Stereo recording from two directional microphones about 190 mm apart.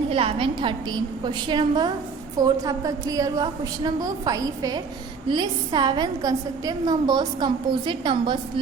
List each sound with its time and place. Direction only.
0.1 s a woman's voice: 30° right (ahead or behind)